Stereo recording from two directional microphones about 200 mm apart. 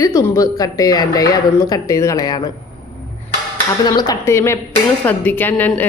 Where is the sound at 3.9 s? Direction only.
20° left (ahead or behind).